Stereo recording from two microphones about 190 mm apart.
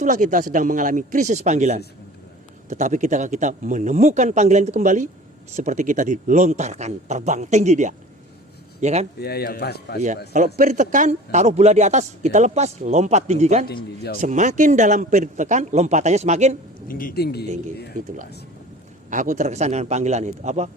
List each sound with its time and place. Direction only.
0.0 s a man's voice: 40° right (ahead or behind)
9.2 s speech: 55° left (ahead or behind)
10.3 s a man's voice: 40° right (ahead or behind)
16.9 s speech: 50° left (ahead or behind)
19.1 s a man's voice: 40° right (ahead or behind)